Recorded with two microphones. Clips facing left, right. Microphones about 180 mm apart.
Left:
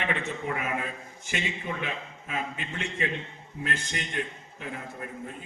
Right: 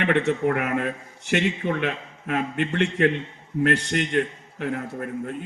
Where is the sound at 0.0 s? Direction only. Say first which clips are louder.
Right 10 dB; 70° right (ahead or behind).